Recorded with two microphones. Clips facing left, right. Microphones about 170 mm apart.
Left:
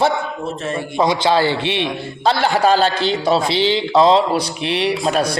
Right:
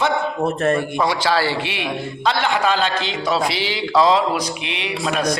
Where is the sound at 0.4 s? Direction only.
55° right (ahead or behind).